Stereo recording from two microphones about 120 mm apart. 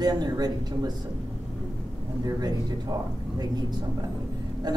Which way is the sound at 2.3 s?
35° right (ahead or behind).